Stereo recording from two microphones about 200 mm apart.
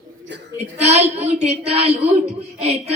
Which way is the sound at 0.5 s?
35° right (ahead or behind).